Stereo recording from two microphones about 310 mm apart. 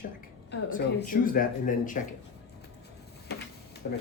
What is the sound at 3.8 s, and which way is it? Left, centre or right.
Speech, left.